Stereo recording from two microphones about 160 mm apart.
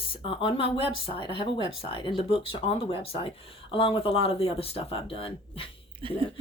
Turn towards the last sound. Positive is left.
turn(degrees=-35)  # may be behind; listen again after turning